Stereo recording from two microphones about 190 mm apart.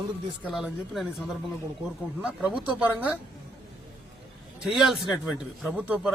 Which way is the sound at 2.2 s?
5° right (ahead or behind).